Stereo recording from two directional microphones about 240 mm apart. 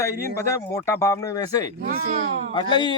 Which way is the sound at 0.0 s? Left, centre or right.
Centre.